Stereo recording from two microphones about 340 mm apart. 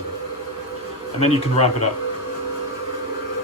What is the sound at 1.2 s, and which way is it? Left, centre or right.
Speech, centre.